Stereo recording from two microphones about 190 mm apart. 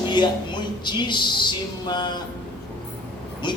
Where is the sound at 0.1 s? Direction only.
25° left (ahead or behind).